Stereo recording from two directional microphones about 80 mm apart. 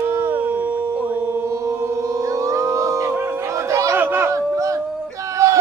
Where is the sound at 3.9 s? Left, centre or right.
Right.